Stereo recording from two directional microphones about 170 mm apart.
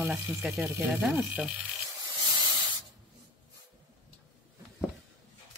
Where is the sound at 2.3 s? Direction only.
25° right (ahead or behind).